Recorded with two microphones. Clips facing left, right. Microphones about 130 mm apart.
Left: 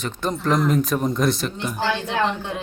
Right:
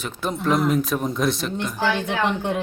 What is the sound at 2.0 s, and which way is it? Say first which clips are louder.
Speech: even; 55° right (ahead or behind).